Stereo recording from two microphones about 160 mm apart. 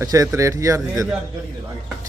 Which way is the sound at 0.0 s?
20° right (ahead or behind).